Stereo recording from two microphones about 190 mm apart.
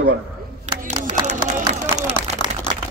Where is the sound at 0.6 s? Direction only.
40° right (ahead or behind).